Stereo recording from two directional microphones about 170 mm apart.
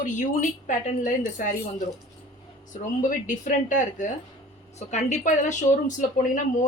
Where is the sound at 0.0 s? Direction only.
45° left (ahead or behind).